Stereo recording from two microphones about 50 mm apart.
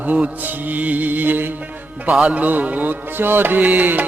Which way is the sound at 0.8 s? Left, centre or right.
Right.